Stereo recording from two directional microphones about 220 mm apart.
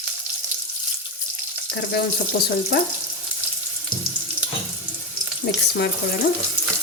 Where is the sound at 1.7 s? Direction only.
45° left (ahead or behind).